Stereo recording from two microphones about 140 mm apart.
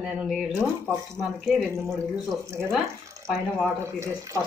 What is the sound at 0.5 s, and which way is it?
Speech, 20° right (ahead or behind).